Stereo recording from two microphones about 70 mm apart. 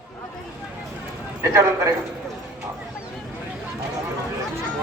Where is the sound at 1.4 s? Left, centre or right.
Right.